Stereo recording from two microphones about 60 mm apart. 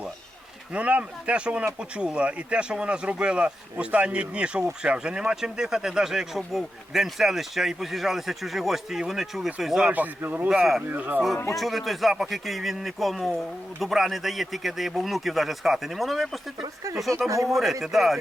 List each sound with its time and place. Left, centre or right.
0.7 s speech: right; by 9.9 s centre
9.9 s speech: right
10.5 s speech: centre
10.9 s speech: right
11.5 s speech: centre